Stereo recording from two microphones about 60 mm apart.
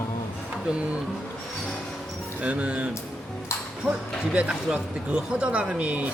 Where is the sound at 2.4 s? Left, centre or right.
Right.